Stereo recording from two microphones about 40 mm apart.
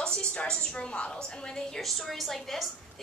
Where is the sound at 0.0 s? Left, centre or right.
Left.